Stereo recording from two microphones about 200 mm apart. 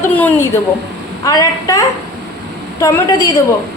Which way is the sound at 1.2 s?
15° left (ahead or behind).